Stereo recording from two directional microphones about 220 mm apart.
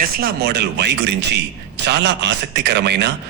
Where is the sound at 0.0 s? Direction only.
45° right (ahead or behind).